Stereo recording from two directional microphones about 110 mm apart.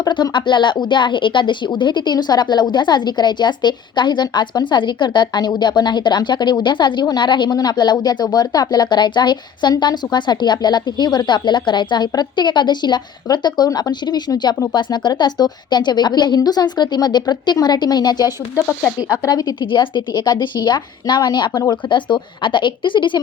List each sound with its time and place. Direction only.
0.0 s a woman's voice: 45° left (ahead or behind)